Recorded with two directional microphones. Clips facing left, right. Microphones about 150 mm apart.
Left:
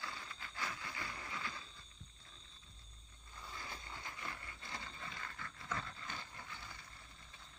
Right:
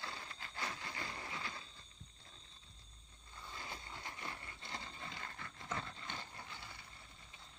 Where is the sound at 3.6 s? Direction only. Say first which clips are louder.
Right 1 dB; 30° right (ahead or behind).